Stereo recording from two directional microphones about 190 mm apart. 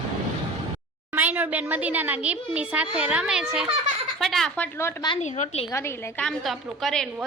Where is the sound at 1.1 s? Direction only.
10° right (ahead or behind).